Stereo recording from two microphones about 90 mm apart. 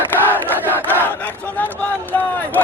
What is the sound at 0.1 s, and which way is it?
Crowd, 20° left (ahead or behind).